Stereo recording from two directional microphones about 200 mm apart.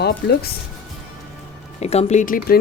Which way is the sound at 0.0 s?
55° left (ahead or behind).